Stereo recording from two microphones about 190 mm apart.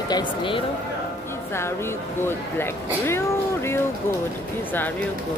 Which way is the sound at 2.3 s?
10° left (ahead or behind).